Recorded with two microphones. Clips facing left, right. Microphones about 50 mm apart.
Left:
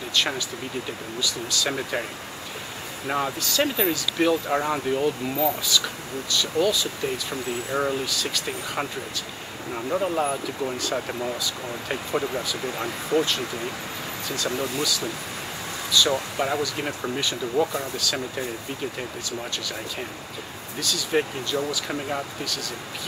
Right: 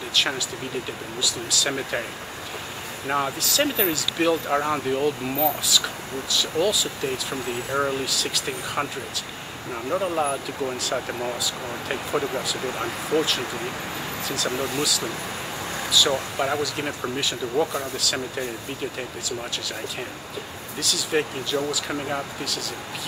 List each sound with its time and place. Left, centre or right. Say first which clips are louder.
0.1 s speech: right 1 dB; centre
3.1 s speech: right 1 dB; centre
9.8 s speech: even; centre
12.6 s speech: right 1 dB; centre
13.1 s speech: even; centre
14.8 s speech: right 1 dB; centre
20.8 s speech: even; centre